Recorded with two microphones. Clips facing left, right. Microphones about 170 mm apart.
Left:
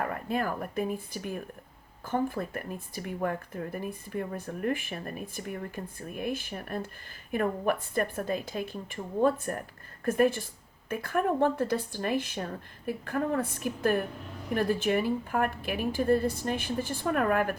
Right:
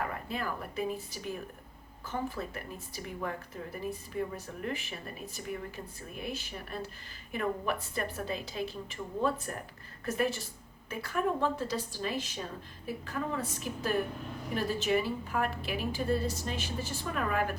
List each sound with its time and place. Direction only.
0.0 s speech: 50° left (ahead or behind)